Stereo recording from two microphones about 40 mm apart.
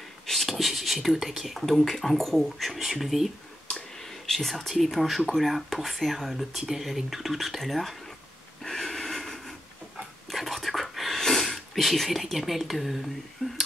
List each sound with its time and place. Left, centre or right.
0.3 s speech: centre
4.3 s speech: centre
8.6 s a sound: centre
10.3 s whispering: centre
11.1 s speech: centre
13.4 s speech: centre